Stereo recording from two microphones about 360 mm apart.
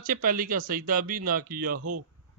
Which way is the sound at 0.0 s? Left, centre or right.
Right.